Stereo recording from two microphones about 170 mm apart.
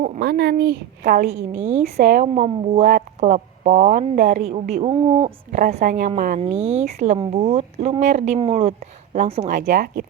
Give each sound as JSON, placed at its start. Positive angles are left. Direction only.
{"t": 0.2, "sound": "speech", "side_deg": -80}
{"t": 1.0, "sound": "a woman's voice", "side_deg": -55}
{"t": 5.5, "sound": "a woman's voice", "side_deg": -50}
{"t": 6.4, "sound": "speech", "side_deg": -40}
{"t": 9.6, "sound": "speech", "side_deg": -65}